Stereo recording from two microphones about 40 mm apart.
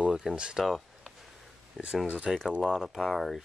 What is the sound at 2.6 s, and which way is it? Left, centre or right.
Speech, centre.